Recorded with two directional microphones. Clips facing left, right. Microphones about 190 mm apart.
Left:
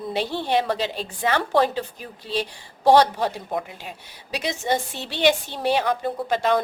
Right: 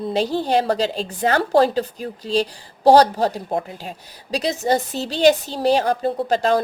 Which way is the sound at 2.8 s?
40° right (ahead or behind).